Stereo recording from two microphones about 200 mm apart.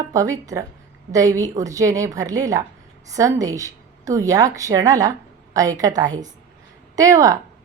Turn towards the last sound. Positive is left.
turn(degrees=-15)  # may be behind; listen again after turning